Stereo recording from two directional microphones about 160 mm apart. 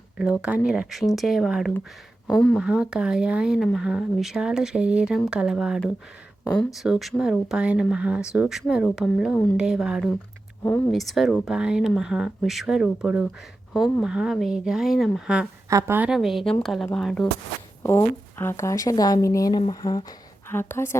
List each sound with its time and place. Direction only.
0.2 s speech: 5° right (ahead or behind)
2.6 s speech: 5° right (ahead or behind)
6.4 s speech: 15° left (ahead or behind)
6.7 s speech: 5° right (ahead or behind)
10.6 s speech: 10° left (ahead or behind)
15.7 s a woman's voice: 15° right (ahead or behind)
16.0 s speech: centre (ahead or behind)
17.8 s speech: 15° left (ahead or behind)
20.5 s a woman's voice: 15° left (ahead or behind)